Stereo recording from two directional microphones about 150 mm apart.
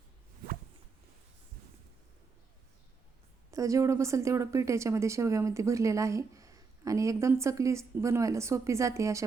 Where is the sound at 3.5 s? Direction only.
20° right (ahead or behind).